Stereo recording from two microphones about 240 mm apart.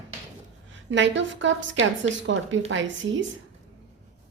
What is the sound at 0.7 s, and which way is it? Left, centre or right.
A woman's voice, right.